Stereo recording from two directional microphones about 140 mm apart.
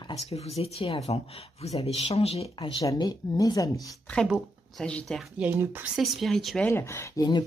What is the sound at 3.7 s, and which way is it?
Speech, 5° left (ahead or behind).